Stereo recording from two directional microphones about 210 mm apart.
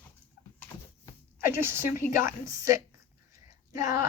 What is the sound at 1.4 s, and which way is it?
Speech, 10° right (ahead or behind).